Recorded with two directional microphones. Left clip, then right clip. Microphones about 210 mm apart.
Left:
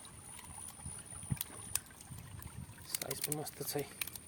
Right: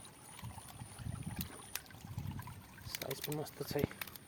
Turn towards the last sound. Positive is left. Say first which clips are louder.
# right 1 dB
turn(degrees=5)  # may be behind; listen again after turning